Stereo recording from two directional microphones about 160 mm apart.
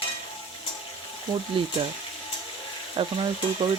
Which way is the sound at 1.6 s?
30° right (ahead or behind).